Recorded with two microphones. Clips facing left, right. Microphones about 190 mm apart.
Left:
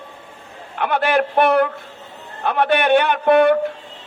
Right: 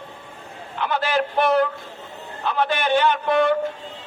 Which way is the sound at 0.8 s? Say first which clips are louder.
Left 4 dB; 60° left (ahead or behind).